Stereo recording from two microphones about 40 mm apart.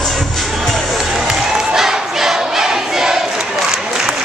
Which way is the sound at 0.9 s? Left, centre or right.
Centre.